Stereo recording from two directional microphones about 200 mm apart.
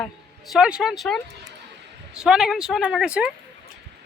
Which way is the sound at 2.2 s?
5° right (ahead or behind).